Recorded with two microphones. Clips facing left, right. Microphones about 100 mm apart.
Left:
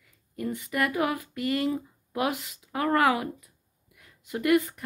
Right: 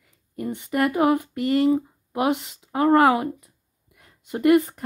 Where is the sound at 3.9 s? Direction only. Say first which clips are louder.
Right 3 dB; 30° right (ahead or behind).